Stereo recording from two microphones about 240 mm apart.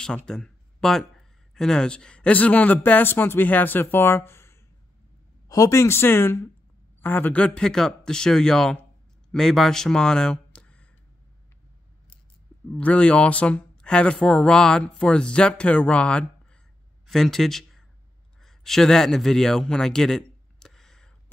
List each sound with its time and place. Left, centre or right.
0.0 s speech: centre
12.7 s speech: centre
18.4 s a sound: centre